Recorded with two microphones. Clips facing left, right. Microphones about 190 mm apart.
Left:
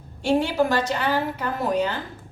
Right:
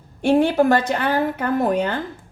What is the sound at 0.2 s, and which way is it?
A woman's voice, 55° right (ahead or behind).